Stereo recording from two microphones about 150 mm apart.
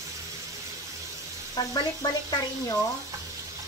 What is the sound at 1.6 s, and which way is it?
Speech, 25° left (ahead or behind).